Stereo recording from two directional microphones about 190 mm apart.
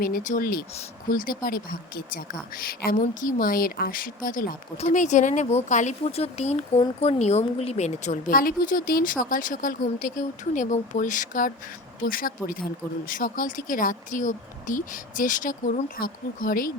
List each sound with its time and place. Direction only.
0.0 s speech: 45° left (ahead or behind)